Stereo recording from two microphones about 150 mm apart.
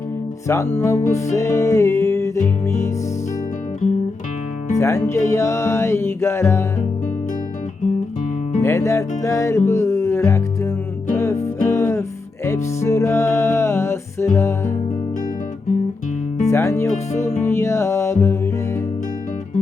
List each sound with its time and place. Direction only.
0.4 s music: 20° left (ahead or behind)
4.8 s music: 20° left (ahead or behind)
8.6 s music: 20° left (ahead or behind)
16.5 s music: 20° left (ahead or behind)